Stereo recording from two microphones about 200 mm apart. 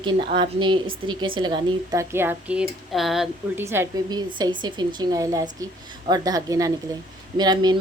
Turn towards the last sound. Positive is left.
turn(degrees=-20)  # may be behind; listen again after turning